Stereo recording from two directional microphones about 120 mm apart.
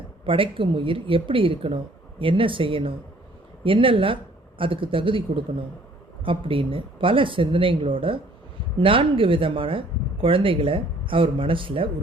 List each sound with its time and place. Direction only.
0.3 s speech: 45° right (ahead or behind)